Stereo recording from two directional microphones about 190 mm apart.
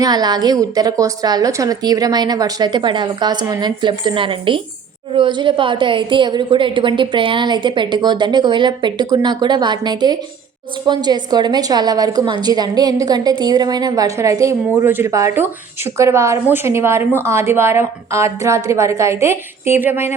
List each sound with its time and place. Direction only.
0.0 s a woman's voice: 20° right (ahead or behind)